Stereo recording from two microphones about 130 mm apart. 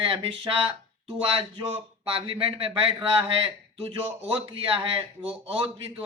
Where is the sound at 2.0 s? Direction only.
45° right (ahead or behind).